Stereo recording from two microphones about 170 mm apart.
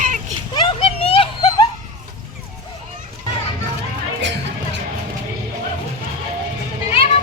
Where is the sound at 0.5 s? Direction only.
30° left (ahead or behind).